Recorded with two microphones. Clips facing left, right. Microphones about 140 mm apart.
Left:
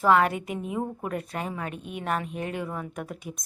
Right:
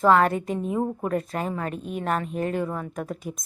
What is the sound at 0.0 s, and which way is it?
A woman's voice, 5° left (ahead or behind).